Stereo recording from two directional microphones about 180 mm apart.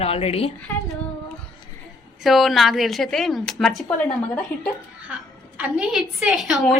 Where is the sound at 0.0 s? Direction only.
35° left (ahead or behind).